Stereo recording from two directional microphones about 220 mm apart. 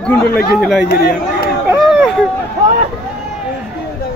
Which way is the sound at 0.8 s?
45° left (ahead or behind).